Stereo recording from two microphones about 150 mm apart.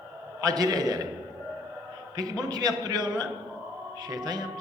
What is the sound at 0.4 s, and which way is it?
Speech, 25° right (ahead or behind).